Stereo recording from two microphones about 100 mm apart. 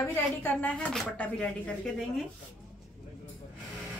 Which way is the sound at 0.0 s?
25° left (ahead or behind).